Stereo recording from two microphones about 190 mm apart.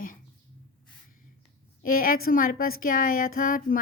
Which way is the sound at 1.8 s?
50° left (ahead or behind).